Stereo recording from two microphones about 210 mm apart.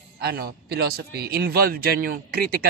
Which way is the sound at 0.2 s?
50° right (ahead or behind).